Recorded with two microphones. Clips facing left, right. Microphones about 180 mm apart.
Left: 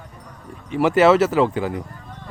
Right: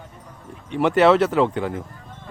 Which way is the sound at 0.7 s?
5° left (ahead or behind).